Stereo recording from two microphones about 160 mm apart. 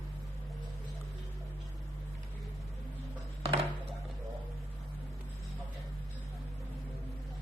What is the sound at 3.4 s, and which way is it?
Chopping, 35° right (ahead or behind).